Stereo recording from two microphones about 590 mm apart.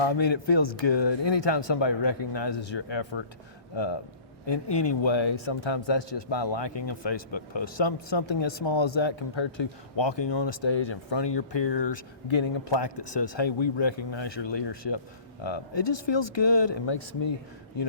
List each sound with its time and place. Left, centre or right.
0.0 s a man's voice: left
4.4 s a man's voice: left